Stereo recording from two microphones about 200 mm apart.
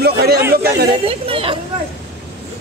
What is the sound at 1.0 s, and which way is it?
Speech, 25° right (ahead or behind).